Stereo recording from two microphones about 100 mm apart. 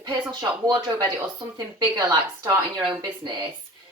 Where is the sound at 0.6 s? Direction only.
40° right (ahead or behind).